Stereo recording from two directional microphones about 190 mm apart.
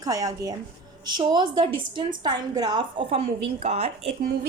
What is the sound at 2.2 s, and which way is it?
A woman's voice, 20° right (ahead or behind).